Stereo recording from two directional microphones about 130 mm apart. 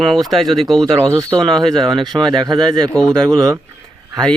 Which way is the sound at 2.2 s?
35° right (ahead or behind).